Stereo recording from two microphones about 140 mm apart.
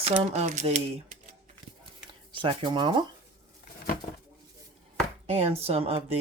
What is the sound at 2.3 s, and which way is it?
Speech, 35° right (ahead or behind).